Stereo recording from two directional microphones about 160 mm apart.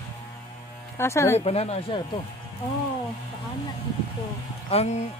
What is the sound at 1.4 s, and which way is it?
Speech, 40° left (ahead or behind).